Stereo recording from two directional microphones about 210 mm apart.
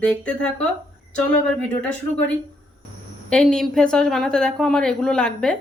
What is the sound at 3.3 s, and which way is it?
Speech, 5° left (ahead or behind).